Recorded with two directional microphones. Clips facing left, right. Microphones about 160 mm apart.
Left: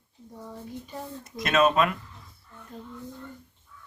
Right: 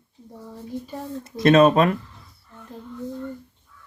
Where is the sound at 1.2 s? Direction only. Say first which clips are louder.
Right 8 dB; 30° right (ahead or behind).